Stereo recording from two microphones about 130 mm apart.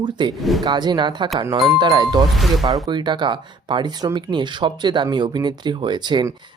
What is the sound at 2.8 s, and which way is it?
Speech, 35° right (ahead or behind).